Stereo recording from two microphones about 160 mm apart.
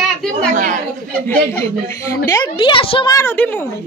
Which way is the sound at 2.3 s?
30° left (ahead or behind).